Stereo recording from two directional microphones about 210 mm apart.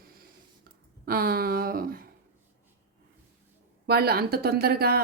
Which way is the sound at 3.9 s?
50° right (ahead or behind).